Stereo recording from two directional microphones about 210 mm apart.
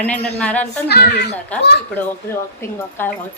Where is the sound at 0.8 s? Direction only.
50° left (ahead or behind).